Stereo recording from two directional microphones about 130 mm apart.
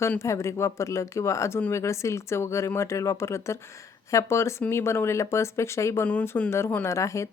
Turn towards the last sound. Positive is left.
turn(degrees=25)  # may be behind; listen again after turning